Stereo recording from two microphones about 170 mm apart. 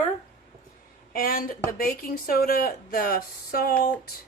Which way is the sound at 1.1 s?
60° left (ahead or behind).